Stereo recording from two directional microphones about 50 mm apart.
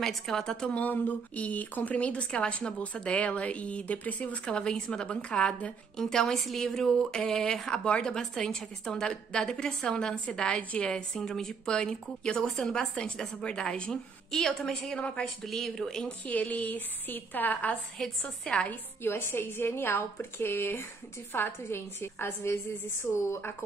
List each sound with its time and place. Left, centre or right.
0.0 s a woman's voice: centre
0.7 s a woman's voice: left
4.6 s a woman's voice: centre
5.9 s a woman's voice: centre
14.4 s a woman's voice: centre
15.0 s a woman's voice: left
15.4 s speech: centre
16.1 s a woman's voice: left
19.0 s a woman's voice: left
23.1 s speech: left